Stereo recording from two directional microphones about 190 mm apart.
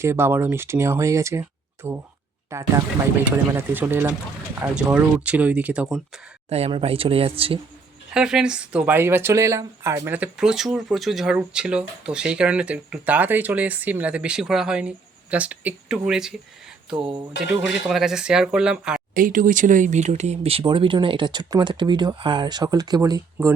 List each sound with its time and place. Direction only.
0.0 s speech: 15° right (ahead or behind)
6.5 s speech: 30° right (ahead or behind)
8.1 s speech: 5° right (ahead or behind)
17.0 s speech: 25° right (ahead or behind)
17.7 s speech: 5° right (ahead or behind)
19.1 s speech: 45° right (ahead or behind); by 23.6 s 20° right (ahead or behind)